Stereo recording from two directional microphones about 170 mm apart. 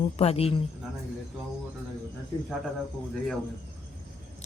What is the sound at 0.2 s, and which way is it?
Speech, 35° left (ahead or behind).